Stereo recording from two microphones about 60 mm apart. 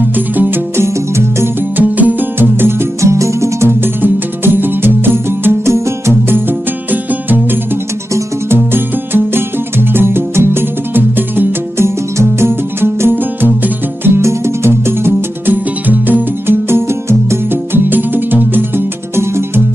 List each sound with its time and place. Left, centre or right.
0.0 s music: right
0.8 s music: right
1.8 s music: right
2.3 s music: right
3.0 s music: right
3.8 s music: right
5.7 s music: right
6.9 s music: right
8.5 s music: right
11.8 s music: right